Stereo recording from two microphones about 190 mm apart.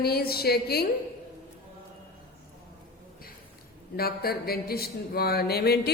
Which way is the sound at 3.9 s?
55° left (ahead or behind).